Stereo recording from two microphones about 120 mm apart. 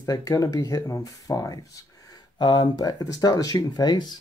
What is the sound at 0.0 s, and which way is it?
Speech, 30° left (ahead or behind).